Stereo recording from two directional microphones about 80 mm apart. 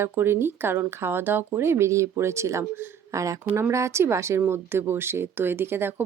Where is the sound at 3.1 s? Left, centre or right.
Right.